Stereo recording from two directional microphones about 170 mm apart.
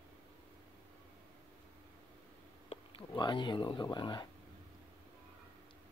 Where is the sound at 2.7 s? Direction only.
30° left (ahead or behind).